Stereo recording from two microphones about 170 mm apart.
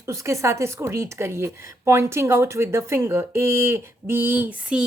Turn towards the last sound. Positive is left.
turn(degrees=-5)  # may be behind; listen again after turning